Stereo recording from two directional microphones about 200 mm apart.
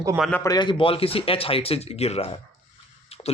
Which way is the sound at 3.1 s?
30° left (ahead or behind).